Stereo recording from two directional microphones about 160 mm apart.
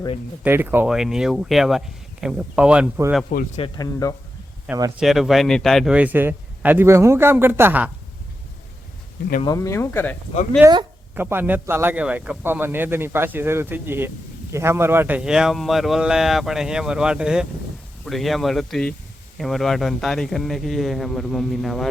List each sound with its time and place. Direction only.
0.4 s speech: 15° right (ahead or behind)
3.2 s speech: 55° left (ahead or behind)
3.8 s speech: 20° left (ahead or behind)
4.9 s speech: centre (ahead or behind)
9.5 s speech: 20° left (ahead or behind)
10.6 s speech: 25° right (ahead or behind)
11.1 s speech: 15° right (ahead or behind)